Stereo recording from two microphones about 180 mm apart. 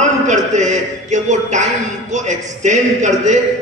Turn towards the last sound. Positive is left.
turn(degrees=-40)  # may be behind; listen again after turning